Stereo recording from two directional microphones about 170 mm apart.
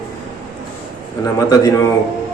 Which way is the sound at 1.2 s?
20° left (ahead or behind).